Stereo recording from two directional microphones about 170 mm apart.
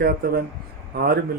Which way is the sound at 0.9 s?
70° right (ahead or behind).